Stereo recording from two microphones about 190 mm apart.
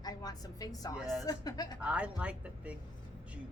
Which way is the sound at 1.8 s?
5° right (ahead or behind).